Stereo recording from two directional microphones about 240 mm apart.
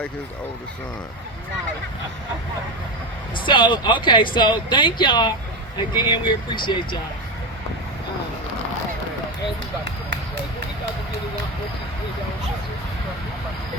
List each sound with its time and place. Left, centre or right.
3.3 s speech: centre